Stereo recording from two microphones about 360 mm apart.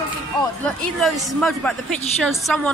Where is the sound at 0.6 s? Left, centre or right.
Centre.